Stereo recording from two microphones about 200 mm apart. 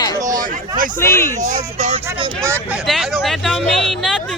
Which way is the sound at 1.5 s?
35° right (ahead or behind).